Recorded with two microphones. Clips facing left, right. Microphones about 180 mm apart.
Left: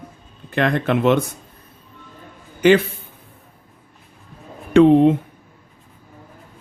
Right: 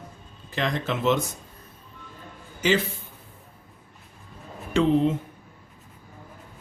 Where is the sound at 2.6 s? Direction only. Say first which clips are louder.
Left 9 dB; 60° left (ahead or behind).